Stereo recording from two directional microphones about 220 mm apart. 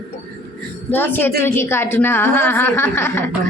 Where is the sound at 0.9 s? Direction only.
10° left (ahead or behind).